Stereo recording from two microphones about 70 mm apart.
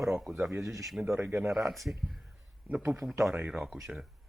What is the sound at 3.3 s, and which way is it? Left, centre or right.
Speech, right.